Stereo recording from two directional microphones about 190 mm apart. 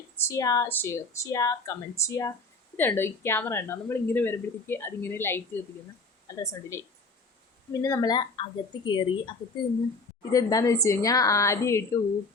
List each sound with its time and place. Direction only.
0.3 s speech: 15° left (ahead or behind)
10.3 s speech: 15° left (ahead or behind)